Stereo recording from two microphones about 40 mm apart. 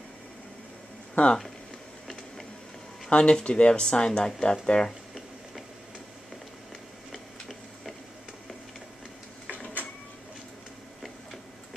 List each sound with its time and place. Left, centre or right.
1.1 s speech: left
3.1 s speech: left
7.1 s printer: centre